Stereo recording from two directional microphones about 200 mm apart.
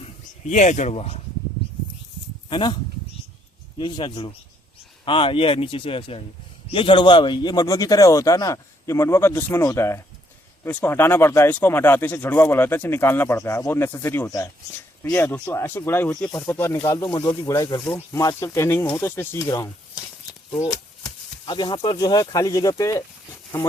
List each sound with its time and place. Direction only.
0.4 s speech: 35° left (ahead or behind)
2.5 s speech: 25° left (ahead or behind)
3.8 s speech: 25° left (ahead or behind)
20.5 s a sound: 5° left (ahead or behind)
21.4 s speech: 20° left (ahead or behind)